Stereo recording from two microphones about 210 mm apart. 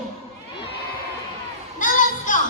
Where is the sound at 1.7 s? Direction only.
40° left (ahead or behind).